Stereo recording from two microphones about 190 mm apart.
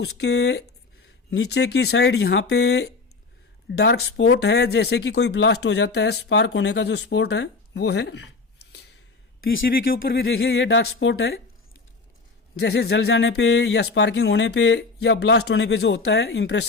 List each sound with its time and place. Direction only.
0.0 s speech: 60° left (ahead or behind)
9.6 s speech: 50° left (ahead or behind); by 11.3 s 70° left (ahead or behind)
12.5 s speech: 60° left (ahead or behind)